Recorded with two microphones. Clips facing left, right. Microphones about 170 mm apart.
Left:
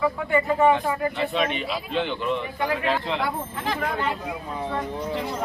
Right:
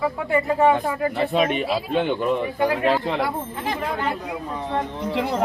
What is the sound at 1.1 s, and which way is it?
Speech, 40° right (ahead or behind).